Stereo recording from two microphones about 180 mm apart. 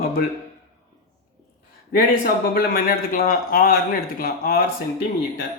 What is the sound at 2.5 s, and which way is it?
A man's voice, 55° left (ahead or behind).